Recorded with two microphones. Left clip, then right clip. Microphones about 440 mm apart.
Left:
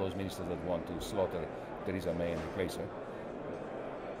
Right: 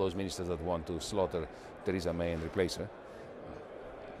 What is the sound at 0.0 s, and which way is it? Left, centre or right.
Speech, right.